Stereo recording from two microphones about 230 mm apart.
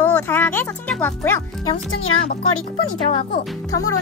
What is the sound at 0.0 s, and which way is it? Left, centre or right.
A child's voice, centre.